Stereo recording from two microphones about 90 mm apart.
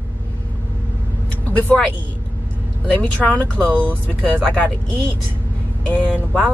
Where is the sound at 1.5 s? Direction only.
15° left (ahead or behind).